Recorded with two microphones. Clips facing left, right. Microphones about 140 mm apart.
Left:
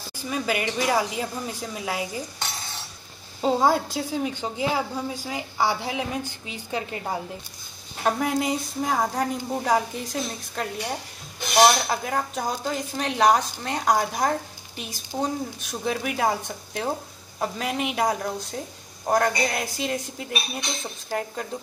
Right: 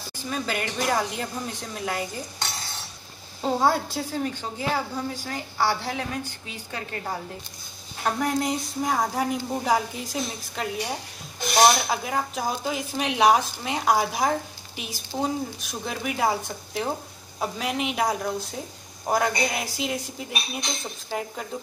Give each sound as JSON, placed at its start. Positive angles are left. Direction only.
{"t": 0.3, "sound": "a woman's voice", "side_deg": 5}
{"t": 3.3, "sound": "a woman's voice", "side_deg": 10}
{"t": 8.0, "sound": "a woman's voice", "side_deg": 5}